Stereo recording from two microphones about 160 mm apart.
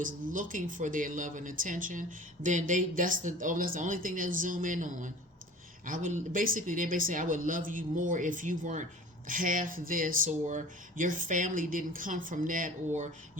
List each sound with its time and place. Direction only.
0.0 s speech: 55° right (ahead or behind)